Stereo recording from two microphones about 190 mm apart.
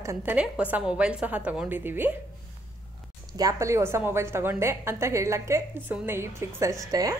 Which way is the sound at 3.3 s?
15° right (ahead or behind).